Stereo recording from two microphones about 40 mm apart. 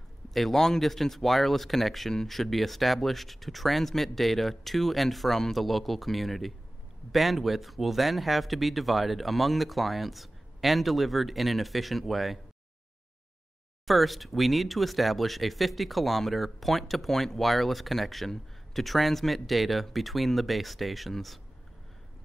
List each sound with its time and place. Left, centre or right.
0.3 s speech: centre
13.8 s speech: centre